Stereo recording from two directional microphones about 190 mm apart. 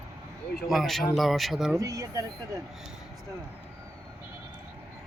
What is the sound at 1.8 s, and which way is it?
Speech, 20° right (ahead or behind).